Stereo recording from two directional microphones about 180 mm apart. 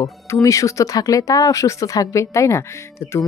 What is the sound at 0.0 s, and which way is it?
Speech, 15° left (ahead or behind).